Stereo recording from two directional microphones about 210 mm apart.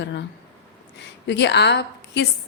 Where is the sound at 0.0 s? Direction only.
55° left (ahead or behind).